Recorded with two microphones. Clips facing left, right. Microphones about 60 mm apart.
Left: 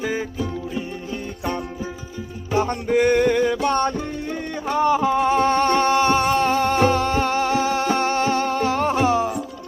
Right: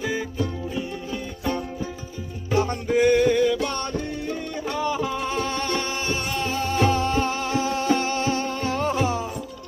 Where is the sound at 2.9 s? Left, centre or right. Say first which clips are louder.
Left 1 dB; left.